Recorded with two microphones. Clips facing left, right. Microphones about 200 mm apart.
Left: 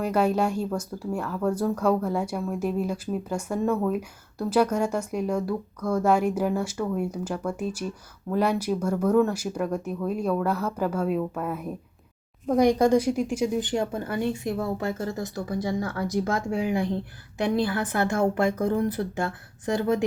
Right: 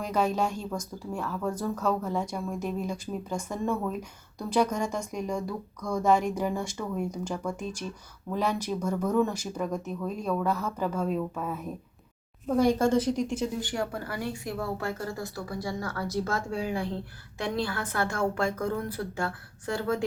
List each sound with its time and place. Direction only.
0.0 s speech: 10° left (ahead or behind)